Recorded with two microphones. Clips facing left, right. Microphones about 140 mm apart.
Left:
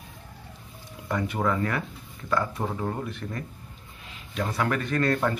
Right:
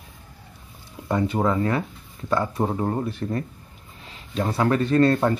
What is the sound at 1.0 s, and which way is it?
Speech, 25° right (ahead or behind).